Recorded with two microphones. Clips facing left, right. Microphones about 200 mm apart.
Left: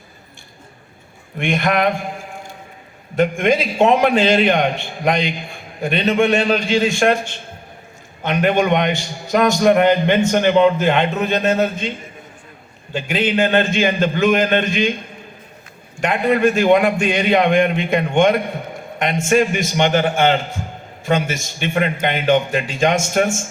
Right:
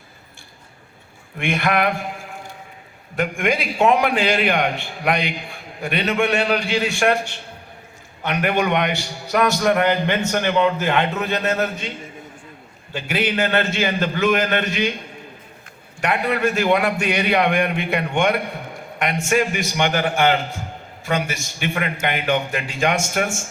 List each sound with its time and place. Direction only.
1.4 s a man's voice: 20° left (ahead or behind)
3.2 s a man's voice: 20° left (ahead or behind)
8.2 s a man's voice: 20° left (ahead or behind)
16.0 s a man's voice: 20° left (ahead or behind)